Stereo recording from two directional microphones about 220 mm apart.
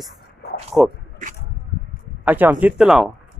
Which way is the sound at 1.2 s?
35° right (ahead or behind).